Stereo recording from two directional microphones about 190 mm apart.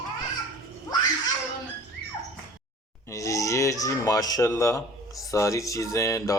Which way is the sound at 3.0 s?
15° left (ahead or behind).